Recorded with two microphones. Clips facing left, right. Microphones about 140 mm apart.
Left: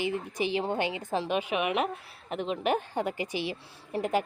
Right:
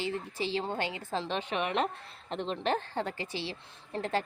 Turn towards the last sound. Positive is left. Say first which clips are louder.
# left 4 dB
turn(degrees=15)  # may be behind; listen again after turning